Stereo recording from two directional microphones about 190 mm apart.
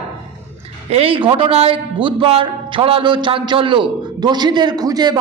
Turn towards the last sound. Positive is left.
turn(degrees=-20)  # may be behind; listen again after turning